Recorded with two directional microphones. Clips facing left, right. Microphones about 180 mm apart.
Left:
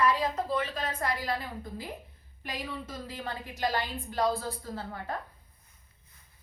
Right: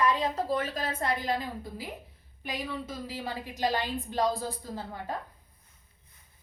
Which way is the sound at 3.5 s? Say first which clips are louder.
Right 2 dB; 20° right (ahead or behind).